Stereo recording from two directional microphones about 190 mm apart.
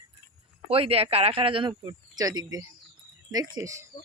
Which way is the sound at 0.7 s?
30° right (ahead or behind).